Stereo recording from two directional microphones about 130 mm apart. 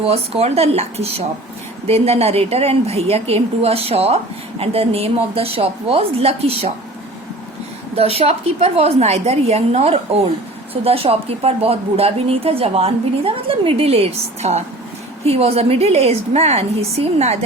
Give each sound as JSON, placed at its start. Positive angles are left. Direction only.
{"t": 0.0, "sound": "a woman's voice", "side_deg": -50}
{"t": 7.9, "sound": "a woman's voice", "side_deg": -50}